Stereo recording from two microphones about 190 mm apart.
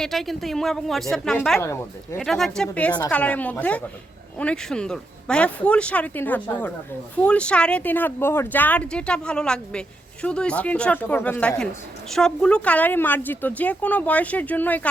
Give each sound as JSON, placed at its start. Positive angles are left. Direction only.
{"t": 0.0, "sound": "speech", "side_deg": 0}